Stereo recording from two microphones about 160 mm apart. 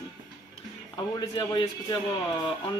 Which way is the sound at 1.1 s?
25° left (ahead or behind).